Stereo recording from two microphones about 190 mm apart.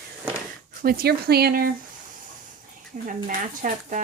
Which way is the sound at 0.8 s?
55° right (ahead or behind).